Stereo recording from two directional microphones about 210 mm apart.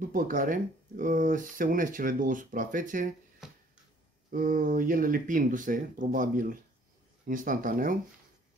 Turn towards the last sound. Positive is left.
turn(degrees=-40)  # may be behind; listen again after turning